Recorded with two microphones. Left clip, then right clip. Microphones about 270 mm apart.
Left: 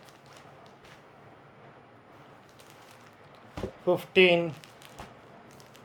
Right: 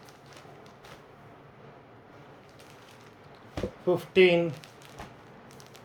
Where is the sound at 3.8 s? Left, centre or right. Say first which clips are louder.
Even; centre.